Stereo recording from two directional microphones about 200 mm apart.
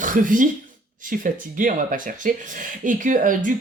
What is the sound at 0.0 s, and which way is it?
Speech, 40° right (ahead or behind).